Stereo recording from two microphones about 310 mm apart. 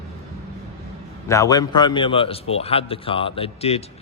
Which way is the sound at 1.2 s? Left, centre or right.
Centre.